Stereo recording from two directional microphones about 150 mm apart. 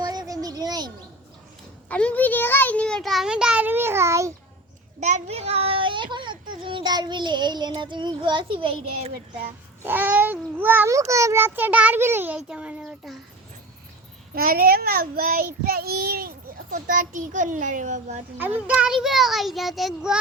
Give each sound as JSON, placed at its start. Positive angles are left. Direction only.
{"t": 0.0, "sound": "a sound", "side_deg": -25}
{"t": 1.9, "sound": "a child's voice", "side_deg": 10}
{"t": 4.9, "sound": "a child's voice", "side_deg": -55}
{"t": 9.8, "sound": "a child's voice", "side_deg": -10}
{"t": 14.3, "sound": "child singing", "side_deg": -75}
{"t": 16.7, "sound": "a child's voice", "side_deg": -60}
{"t": 18.7, "sound": "a child's voice", "side_deg": -5}